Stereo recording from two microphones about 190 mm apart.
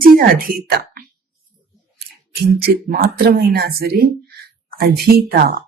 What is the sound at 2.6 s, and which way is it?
Speech, 50° right (ahead or behind).